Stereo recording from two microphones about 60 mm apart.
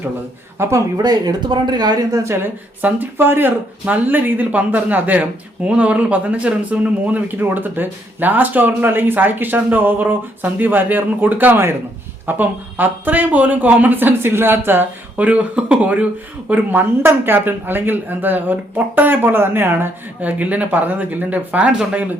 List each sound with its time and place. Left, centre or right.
0.6 s speech: right
2.0 s a woman's voice: right
2.8 s speech: right
15.1 s speech: right
16.5 s speech: right
20.2 s speech: right